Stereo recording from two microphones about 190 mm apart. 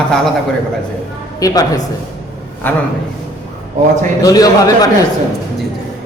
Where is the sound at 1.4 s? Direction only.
20° left (ahead or behind).